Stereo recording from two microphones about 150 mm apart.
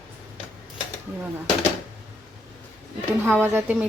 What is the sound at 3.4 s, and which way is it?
Speech, 10° right (ahead or behind).